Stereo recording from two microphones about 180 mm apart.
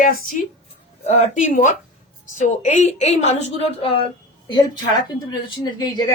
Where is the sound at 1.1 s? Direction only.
40° left (ahead or behind).